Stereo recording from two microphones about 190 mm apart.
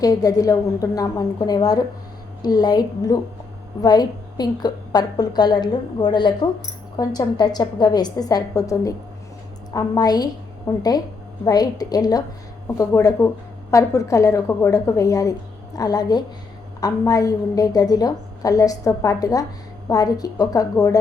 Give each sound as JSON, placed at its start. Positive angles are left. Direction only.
{"t": 0.0, "sound": "a woman's voice", "side_deg": 20}